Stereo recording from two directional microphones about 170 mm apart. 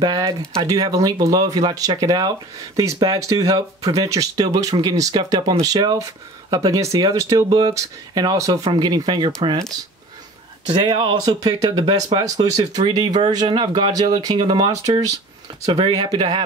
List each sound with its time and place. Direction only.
0.0 s speech: 25° right (ahead or behind)
10.7 s speech: 25° right (ahead or behind)